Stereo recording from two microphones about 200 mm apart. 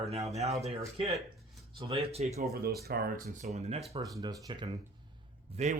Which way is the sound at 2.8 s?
50° right (ahead or behind).